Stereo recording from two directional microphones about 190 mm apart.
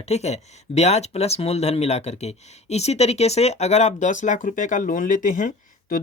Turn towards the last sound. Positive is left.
turn(degrees=45)  # may be behind; listen again after turning